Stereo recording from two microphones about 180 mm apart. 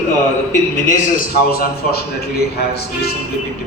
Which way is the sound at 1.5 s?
60° left (ahead or behind).